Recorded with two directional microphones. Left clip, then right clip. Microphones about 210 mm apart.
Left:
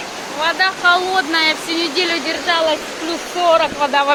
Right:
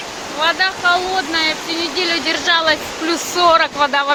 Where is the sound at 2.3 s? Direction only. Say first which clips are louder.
Right 4 dB; 10° right (ahead or behind).